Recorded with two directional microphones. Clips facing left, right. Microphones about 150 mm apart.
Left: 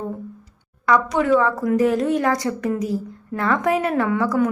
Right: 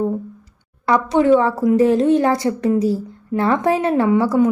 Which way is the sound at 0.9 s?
25° right (ahead or behind).